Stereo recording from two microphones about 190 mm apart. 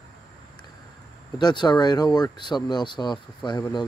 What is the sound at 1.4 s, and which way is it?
Speech, 25° left (ahead or behind).